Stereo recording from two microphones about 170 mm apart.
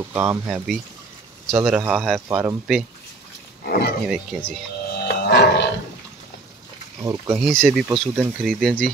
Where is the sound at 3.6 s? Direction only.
60° left (ahead or behind).